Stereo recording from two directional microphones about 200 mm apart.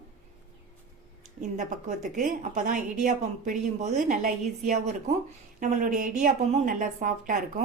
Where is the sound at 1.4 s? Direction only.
40° right (ahead or behind).